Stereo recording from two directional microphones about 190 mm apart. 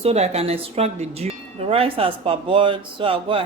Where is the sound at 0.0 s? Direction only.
35° right (ahead or behind).